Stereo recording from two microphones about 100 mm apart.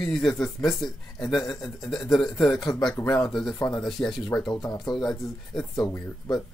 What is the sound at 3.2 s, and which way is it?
Speech, 5° left (ahead or behind).